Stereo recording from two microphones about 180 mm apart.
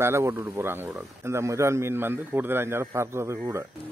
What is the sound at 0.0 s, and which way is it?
Speech, 15° right (ahead or behind).